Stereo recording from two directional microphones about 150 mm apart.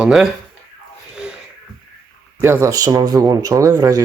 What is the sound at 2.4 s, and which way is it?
Speech, 20° right (ahead or behind).